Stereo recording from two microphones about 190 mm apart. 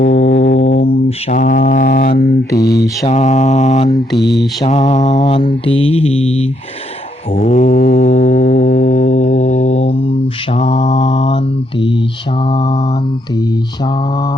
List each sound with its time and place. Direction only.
0.0 s music: 40° left (ahead or behind)
1.3 s mantra: 45° left (ahead or behind)
3.1 s mantra: 35° left (ahead or behind)
4.2 s mantra: 65° left (ahead or behind)
4.6 s mantra: 35° left (ahead or behind)
5.2 s mantra: 25° left (ahead or behind)
12.5 s mantra: 20° left (ahead or behind)